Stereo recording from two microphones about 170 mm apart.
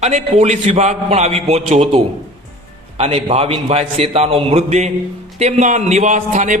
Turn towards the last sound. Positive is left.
turn(degrees=-45)  # may be behind; listen again after turning